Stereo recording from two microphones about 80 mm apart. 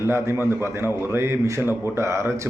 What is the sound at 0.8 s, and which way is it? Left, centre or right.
Speech, right.